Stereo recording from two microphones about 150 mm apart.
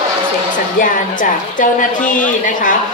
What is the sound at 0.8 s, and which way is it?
A woman's voice, 60° left (ahead or behind).